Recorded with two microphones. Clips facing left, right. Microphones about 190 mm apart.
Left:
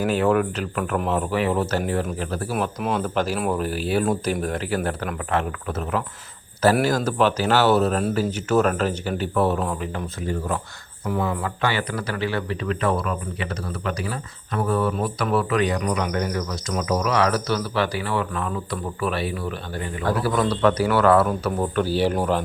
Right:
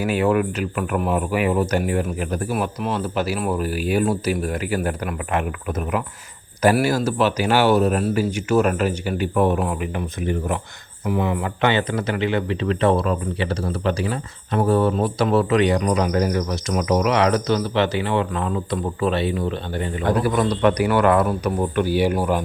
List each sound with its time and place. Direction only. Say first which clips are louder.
0.0 s speech: right 1 dB; 10° right (ahead or behind)
2.8 s speech: even; 5° right (ahead or behind)